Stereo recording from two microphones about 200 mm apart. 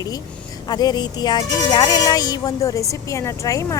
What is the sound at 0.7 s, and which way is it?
A woman's voice, 20° left (ahead or behind).